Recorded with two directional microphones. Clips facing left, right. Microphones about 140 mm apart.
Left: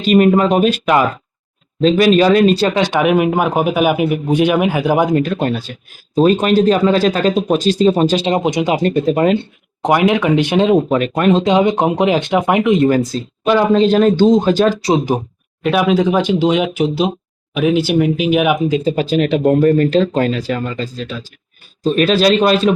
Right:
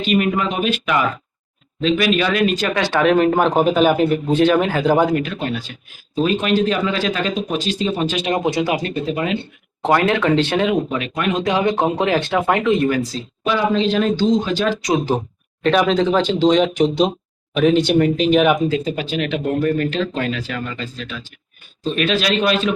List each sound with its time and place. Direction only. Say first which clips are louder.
0.0 s speech: left 7 dB; 40° left (ahead or behind)
2.7 s a man's voice: left 2 dB; 20° left (ahead or behind)
5.1 s speech: left 5 dB; 40° left (ahead or behind)
8.4 s speech: left 3 dB; 20° left (ahead or behind)
8.8 s speech: left 8 dB; 45° left (ahead or behind)
9.8 s a man's voice: left 3 dB; 15° left (ahead or behind)
10.8 s speech: left 8 dB; 45° left (ahead or behind)
11.4 s a man's voice: left 4 dB; 20° left (ahead or behind)
13.4 s speech: left 6 dB; 45° left (ahead or behind)
15.6 s a man's voice: left 2 dB; 5° left (ahead or behind)
18.9 s speech: left 7 dB; 40° left (ahead or behind)